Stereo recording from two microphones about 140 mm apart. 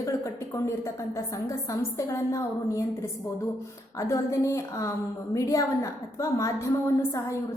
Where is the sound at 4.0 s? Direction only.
20° left (ahead or behind).